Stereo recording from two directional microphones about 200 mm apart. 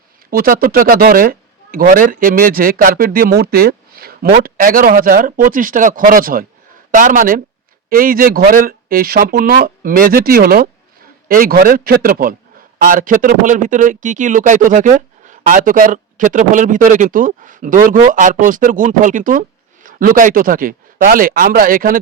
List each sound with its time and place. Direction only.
0.3 s speech: 45° right (ahead or behind)